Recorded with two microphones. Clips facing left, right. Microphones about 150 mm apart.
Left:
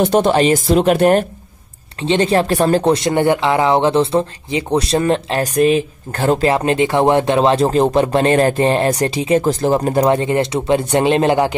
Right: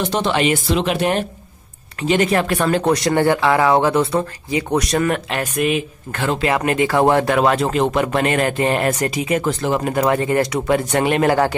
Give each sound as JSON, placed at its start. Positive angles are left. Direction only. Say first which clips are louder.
{"t": 0.0, "sound": "speech", "louder": "left 6 dB", "side_deg": 50}
{"t": 2.0, "sound": "speech", "louder": "left 2 dB", "side_deg": 30}
{"t": 6.5, "sound": "speech", "louder": "left 2 dB", "side_deg": 30}